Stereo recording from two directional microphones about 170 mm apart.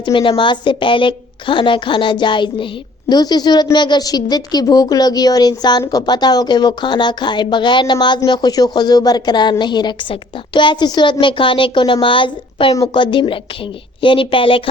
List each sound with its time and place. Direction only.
0.0 s a woman's voice: 30° left (ahead or behind)